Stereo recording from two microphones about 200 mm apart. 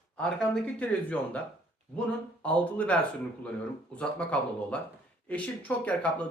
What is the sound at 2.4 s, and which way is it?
Speech, 5° left (ahead or behind).